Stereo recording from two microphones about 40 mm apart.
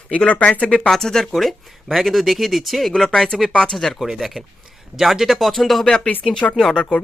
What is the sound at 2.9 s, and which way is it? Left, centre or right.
Speech, centre.